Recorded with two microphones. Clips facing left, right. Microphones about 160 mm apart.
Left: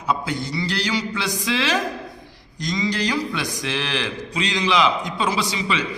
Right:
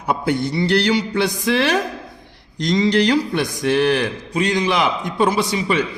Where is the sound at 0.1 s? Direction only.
60° right (ahead or behind).